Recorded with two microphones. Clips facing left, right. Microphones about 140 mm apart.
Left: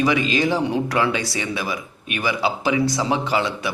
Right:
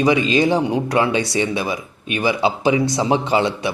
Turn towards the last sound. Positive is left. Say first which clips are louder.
# right 4 dB
turn(degrees=-25)  # may be behind; listen again after turning